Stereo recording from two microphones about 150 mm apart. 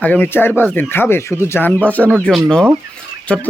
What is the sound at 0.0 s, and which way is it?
Speech, 10° left (ahead or behind).